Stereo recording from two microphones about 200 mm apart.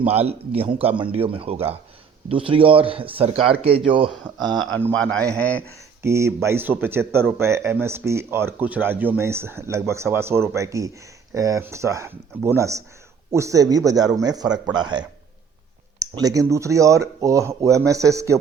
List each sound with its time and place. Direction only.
0.0 s a man's voice: 30° right (ahead or behind)
4.5 s speech: centre (ahead or behind)
6.0 s a man's voice: 15° right (ahead or behind)